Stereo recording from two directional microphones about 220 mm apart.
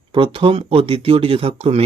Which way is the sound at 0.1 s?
25° right (ahead or behind).